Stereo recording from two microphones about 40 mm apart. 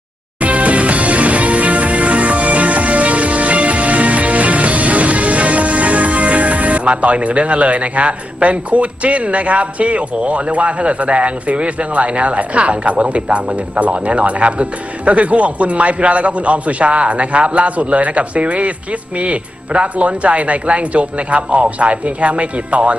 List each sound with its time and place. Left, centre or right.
0.4 s music: right